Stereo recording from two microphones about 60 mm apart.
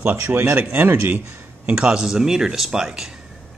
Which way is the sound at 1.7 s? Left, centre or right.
Centre.